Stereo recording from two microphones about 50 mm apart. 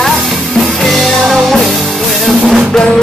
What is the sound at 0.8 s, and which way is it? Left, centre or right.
Music, centre.